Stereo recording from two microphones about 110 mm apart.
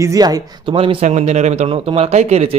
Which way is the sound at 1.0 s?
90° right.